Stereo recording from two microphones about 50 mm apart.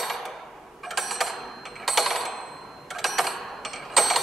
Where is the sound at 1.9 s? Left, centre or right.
Centre.